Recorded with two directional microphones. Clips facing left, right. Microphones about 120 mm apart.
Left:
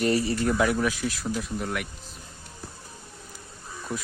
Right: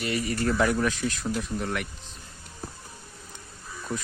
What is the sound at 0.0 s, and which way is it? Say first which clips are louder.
Speech: left 5 dB; 35° left (ahead or behind).